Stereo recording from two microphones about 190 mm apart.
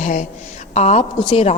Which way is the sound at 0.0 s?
40° left (ahead or behind).